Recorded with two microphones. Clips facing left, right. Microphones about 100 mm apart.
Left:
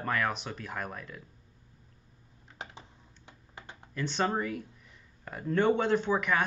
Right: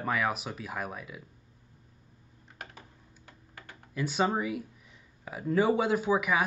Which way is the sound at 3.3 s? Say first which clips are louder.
Left 2 dB; 20° left (ahead or behind).